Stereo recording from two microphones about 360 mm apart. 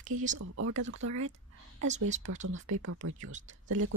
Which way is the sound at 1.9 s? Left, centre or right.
Centre.